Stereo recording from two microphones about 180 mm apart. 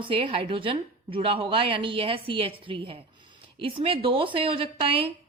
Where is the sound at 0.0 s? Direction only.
30° right (ahead or behind).